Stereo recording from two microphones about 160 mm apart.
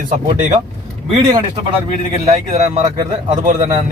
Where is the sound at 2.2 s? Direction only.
45° right (ahead or behind).